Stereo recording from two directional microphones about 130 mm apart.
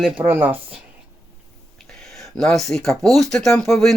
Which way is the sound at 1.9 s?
5° left (ahead or behind).